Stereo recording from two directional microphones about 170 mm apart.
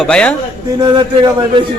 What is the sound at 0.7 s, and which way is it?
Speech, 25° right (ahead or behind).